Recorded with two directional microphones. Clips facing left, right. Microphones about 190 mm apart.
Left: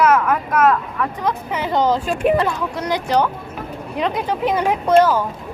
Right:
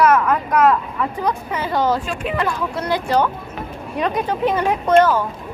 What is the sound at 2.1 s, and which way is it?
Speech, 45° left (ahead or behind).